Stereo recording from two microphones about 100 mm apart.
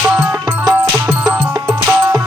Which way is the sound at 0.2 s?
40° right (ahead or behind).